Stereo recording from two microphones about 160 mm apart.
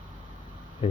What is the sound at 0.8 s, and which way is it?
Speech, 35° left (ahead or behind).